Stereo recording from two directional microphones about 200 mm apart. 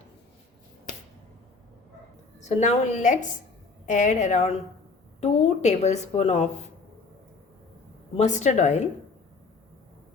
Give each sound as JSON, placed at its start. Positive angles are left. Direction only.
{"t": 2.4, "sound": "a woman's voice", "side_deg": 35}
{"t": 8.1, "sound": "a woman's voice", "side_deg": 35}